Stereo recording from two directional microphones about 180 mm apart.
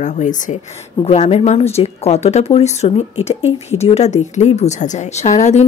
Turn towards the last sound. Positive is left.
turn(degrees=40)  # may be behind; listen again after turning